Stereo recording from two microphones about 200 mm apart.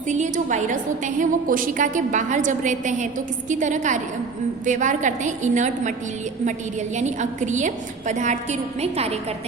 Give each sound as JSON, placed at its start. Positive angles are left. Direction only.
{"t": 0.1, "sound": "a woman's voice", "side_deg": -35}
{"t": 6.9, "sound": "a woman's voice", "side_deg": -35}